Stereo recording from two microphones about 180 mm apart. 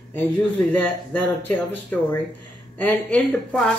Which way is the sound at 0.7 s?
10° left (ahead or behind).